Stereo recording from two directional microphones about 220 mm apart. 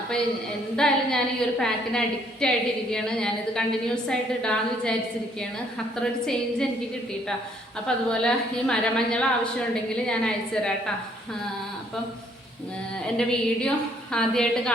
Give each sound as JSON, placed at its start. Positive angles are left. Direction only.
{"t": 0.8, "sound": "a woman's voice", "side_deg": 0}
{"t": 6.0, "sound": "a woman's voice", "side_deg": 5}
{"t": 7.9, "sound": "a woman's voice", "side_deg": 5}
{"t": 13.1, "sound": "a woman's voice", "side_deg": 5}